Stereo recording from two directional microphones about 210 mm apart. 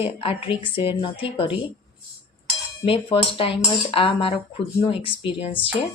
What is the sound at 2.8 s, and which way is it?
A woman's voice, 25° left (ahead or behind).